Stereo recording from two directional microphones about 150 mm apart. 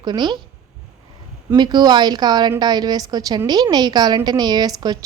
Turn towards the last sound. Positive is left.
turn(degrees=-25)  # may be behind; listen again after turning